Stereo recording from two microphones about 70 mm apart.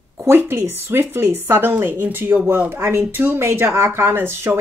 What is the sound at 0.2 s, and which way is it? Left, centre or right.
Speech, right.